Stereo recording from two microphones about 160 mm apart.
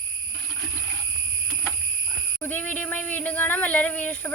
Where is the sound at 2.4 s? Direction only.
10° left (ahead or behind).